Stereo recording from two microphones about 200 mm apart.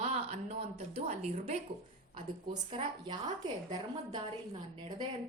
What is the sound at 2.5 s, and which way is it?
Speech, 20° right (ahead or behind).